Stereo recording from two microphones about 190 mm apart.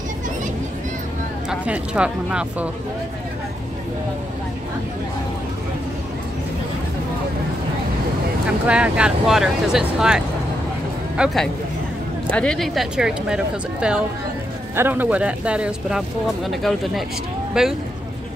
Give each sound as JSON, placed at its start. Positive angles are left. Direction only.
{"t": 1.5, "sound": "speech", "side_deg": -5}
{"t": 8.6, "sound": "speech", "side_deg": -5}